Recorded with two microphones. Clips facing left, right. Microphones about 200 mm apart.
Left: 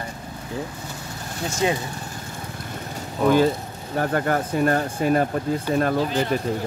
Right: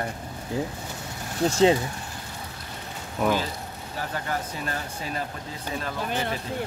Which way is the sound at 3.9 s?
55° left (ahead or behind).